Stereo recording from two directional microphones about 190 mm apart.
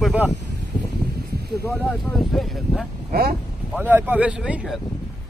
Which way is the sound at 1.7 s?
Centre (ahead or behind).